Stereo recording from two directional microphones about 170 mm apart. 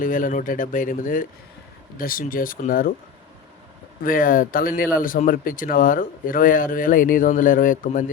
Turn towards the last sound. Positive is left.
turn(degrees=50)  # may be behind; listen again after turning